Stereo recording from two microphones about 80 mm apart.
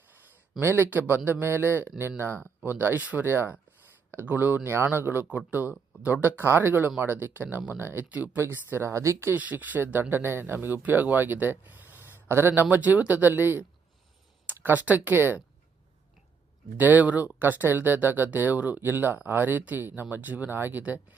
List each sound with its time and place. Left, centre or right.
0.6 s speech: right
9.3 s speech: right
16.7 s speech: right